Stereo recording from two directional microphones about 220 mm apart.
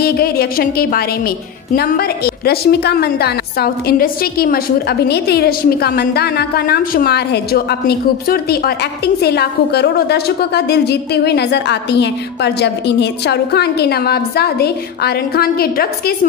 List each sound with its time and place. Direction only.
0.0 s a woman's voice: 45° left (ahead or behind)